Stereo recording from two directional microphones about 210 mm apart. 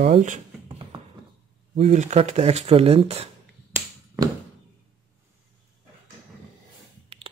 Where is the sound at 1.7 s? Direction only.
35° right (ahead or behind).